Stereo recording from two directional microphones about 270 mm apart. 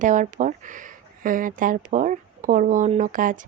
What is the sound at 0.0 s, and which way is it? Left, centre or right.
Speech, right.